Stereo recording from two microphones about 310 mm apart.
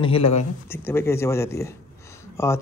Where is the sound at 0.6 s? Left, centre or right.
Centre.